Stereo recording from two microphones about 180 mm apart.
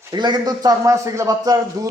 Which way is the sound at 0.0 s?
25° right (ahead or behind).